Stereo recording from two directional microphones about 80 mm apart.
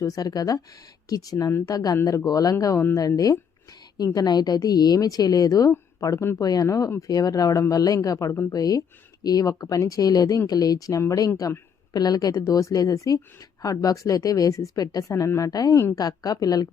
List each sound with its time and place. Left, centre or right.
0.0 s speech: left
8.5 s speech: left
11.9 s speech: left